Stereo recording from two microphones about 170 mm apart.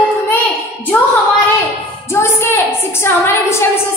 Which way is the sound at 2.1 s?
15° left (ahead or behind).